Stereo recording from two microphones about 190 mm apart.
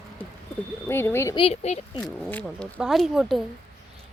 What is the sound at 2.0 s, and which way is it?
Speech, 5° left (ahead or behind).